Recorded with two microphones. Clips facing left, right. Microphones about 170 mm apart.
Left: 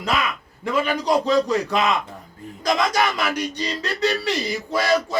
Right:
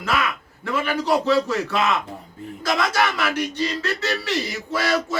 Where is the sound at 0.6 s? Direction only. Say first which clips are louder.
Left 2 dB; 15° left (ahead or behind).